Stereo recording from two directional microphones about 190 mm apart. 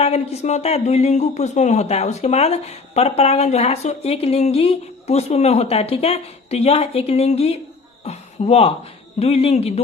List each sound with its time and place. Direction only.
0.0 s speech: 35° left (ahead or behind)